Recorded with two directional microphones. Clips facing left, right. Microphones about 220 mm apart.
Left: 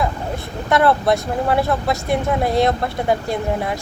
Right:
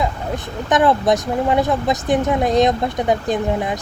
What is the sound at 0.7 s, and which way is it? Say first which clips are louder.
Speech: right 1 dB; 15° right (ahead or behind).